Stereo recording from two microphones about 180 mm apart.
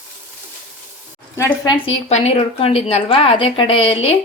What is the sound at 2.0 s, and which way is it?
A woman's voice, 35° left (ahead or behind).